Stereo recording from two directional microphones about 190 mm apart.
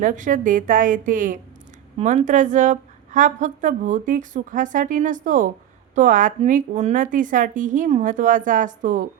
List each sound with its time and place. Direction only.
0.0 s a woman's voice: 45° right (ahead or behind)